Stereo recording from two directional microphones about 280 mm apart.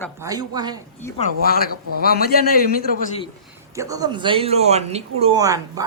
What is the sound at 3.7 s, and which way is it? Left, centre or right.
Speech, centre.